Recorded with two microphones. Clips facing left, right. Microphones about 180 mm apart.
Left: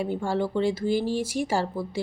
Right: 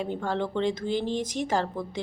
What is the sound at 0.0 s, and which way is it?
Speech, 10° left (ahead or behind).